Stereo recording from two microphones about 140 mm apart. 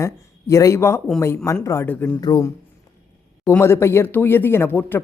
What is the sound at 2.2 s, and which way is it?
A man's voice, 25° left (ahead or behind).